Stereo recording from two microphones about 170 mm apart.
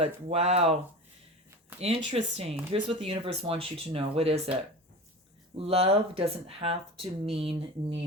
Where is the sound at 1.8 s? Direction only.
35° right (ahead or behind).